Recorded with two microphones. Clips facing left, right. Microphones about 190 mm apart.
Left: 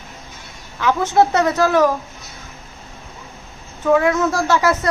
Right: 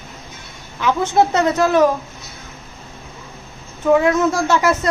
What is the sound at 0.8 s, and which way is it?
Speech, 20° right (ahead or behind).